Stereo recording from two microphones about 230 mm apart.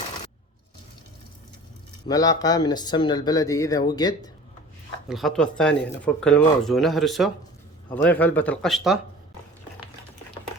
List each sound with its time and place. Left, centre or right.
2.0 s speech: centre
5.0 s speech: centre